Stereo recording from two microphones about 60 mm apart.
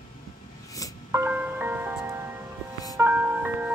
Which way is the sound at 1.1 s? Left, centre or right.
Right.